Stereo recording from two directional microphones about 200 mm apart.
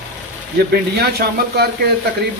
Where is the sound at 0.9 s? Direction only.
50° right (ahead or behind).